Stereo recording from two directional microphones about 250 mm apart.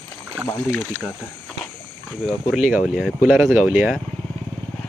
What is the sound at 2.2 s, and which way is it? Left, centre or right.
Speech, centre.